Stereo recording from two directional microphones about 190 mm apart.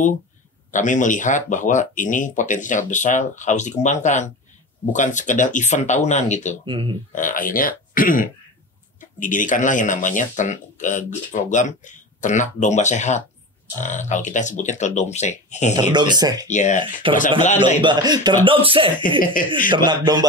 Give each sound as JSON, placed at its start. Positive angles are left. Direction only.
{"t": 0.7, "sound": "speech", "side_deg": 40}
{"t": 6.6, "sound": "speech", "side_deg": -25}
{"t": 7.1, "sound": "speech", "side_deg": 45}
{"t": 15.7, "sound": "speech", "side_deg": -25}
{"t": 16.4, "sound": "speech", "side_deg": 40}
{"t": 17.0, "sound": "speech", "side_deg": -30}
{"t": 19.4, "sound": "speech", "side_deg": 45}
{"t": 19.9, "sound": "speech", "side_deg": -20}